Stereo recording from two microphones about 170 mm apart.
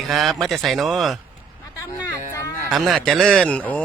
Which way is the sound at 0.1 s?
Centre (ahead or behind).